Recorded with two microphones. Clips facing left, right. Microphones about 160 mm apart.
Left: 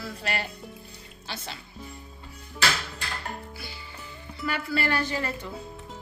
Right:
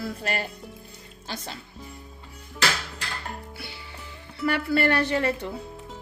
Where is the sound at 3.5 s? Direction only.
70° right (ahead or behind).